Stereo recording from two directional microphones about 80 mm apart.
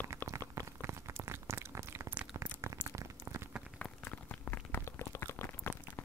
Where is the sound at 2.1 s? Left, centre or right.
Centre.